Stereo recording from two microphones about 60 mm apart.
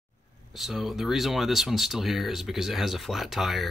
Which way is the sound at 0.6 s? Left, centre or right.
Centre.